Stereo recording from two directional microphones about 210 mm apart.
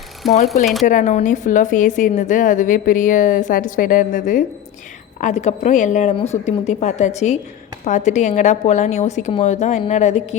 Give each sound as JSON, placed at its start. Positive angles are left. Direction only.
{"t": 0.2, "sound": "speech", "side_deg": 0}
{"t": 0.9, "sound": "a woman's voice", "side_deg": 35}